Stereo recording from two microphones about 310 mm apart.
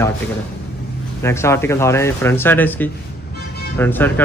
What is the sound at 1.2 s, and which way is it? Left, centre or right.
A man's voice, centre.